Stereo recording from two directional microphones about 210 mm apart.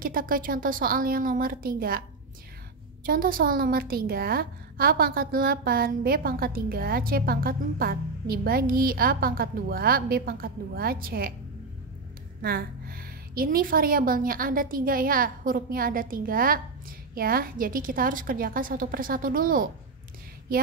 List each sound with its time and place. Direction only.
0.0 s a woman's voice: 40° right (ahead or behind)
3.1 s a woman's voice: 45° right (ahead or behind)
12.4 s a woman's voice: 45° right (ahead or behind)